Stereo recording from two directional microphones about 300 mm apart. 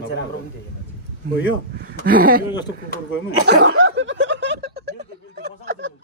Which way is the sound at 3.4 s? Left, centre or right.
Right.